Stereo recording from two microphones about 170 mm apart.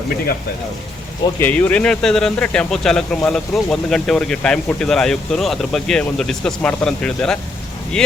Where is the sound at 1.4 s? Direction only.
10° left (ahead or behind).